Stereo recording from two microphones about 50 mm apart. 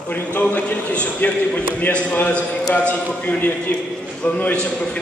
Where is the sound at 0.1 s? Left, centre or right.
Left.